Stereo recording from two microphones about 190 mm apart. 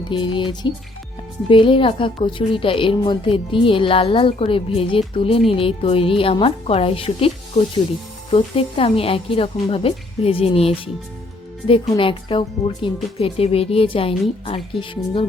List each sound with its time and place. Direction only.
0.1 s a woman's voice: 25° left (ahead or behind)